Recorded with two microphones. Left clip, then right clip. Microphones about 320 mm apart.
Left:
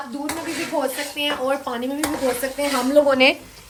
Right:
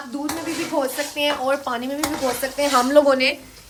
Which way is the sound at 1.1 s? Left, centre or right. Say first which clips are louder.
Right 2 dB; centre.